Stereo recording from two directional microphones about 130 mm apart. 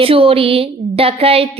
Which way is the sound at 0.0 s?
45° right (ahead or behind).